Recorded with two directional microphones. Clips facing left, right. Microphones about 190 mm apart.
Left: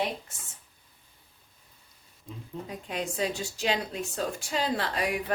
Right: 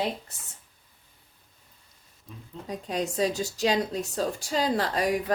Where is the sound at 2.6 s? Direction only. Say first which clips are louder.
Right 5 dB; 40° right (ahead or behind).